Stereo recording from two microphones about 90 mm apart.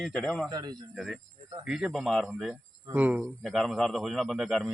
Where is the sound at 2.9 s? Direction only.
20° right (ahead or behind).